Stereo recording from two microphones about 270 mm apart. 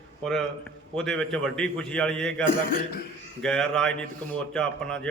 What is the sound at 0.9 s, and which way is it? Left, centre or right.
A man's voice, centre.